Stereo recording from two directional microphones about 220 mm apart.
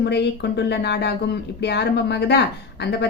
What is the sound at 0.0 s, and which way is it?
A woman's voice, 50° left (ahead or behind).